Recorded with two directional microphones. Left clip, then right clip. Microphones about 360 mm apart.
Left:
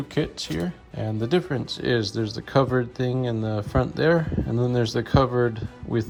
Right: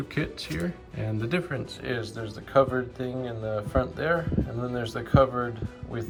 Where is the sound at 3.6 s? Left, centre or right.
Centre.